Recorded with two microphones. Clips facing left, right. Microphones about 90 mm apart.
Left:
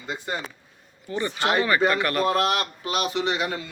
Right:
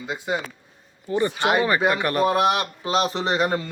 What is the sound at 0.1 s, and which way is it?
Speech, 10° right (ahead or behind).